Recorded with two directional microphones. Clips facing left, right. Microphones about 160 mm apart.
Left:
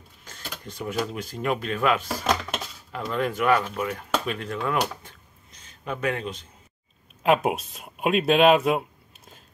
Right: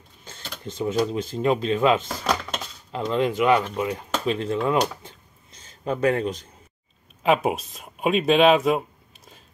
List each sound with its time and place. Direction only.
0.2 s speech: 25° right (ahead or behind)
4.4 s a sound: 25° right (ahead or behind)
5.9 s a man's voice: 35° right (ahead or behind)
7.2 s speech: centre (ahead or behind)